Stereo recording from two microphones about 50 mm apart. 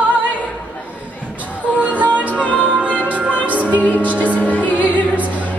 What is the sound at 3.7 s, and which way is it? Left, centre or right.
Music, left.